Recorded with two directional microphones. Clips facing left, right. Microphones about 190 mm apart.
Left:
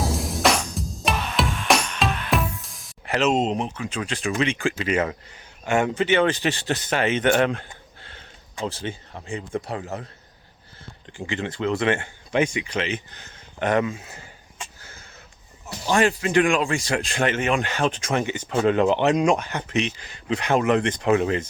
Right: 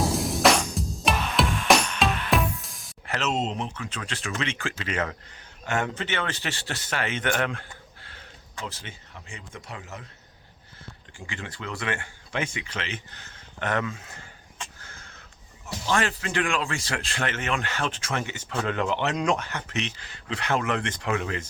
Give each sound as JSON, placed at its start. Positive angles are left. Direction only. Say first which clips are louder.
{"t": 0.0, "sound": "music", "louder": "right 1 dB", "side_deg": 0}
{"t": 3.1, "sound": "speech", "louder": "left 7 dB", "side_deg": 15}
{"t": 11.3, "sound": "speech", "louder": "left 11 dB", "side_deg": 25}